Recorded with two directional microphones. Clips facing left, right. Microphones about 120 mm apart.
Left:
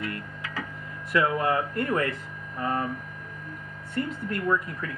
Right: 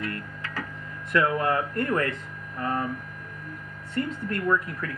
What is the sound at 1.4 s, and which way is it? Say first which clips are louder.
Speech: even; 15° left (ahead or behind).